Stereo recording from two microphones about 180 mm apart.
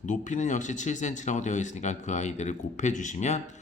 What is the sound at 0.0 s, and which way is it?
Speech, 45° left (ahead or behind).